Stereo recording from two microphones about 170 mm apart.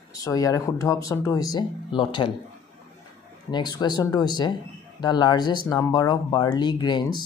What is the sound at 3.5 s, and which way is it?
Speech, 25° left (ahead or behind).